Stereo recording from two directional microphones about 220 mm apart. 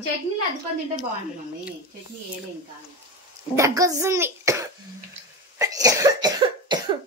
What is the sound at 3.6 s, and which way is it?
A woman's voice, 15° right (ahead or behind).